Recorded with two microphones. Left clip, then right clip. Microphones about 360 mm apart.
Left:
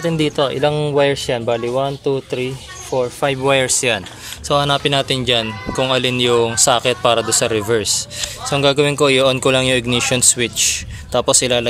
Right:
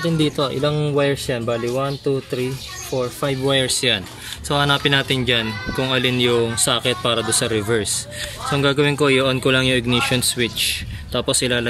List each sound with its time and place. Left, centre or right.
0.2 s speech: centre
3.0 s speech: centre